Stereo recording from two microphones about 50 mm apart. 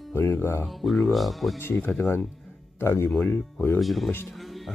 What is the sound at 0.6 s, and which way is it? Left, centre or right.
Speech, centre.